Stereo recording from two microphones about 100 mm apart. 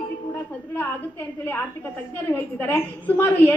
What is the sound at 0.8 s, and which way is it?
A woman's voice, 20° left (ahead or behind).